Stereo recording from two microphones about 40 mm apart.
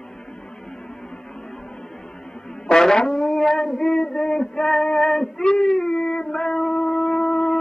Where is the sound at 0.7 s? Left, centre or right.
Centre.